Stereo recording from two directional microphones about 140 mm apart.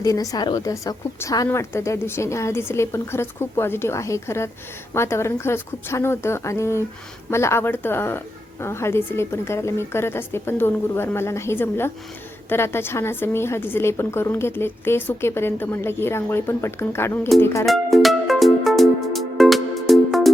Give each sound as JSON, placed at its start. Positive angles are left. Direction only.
{"t": 0.0, "sound": "a woman's voice", "side_deg": 25}
{"t": 17.7, "sound": "music", "side_deg": 0}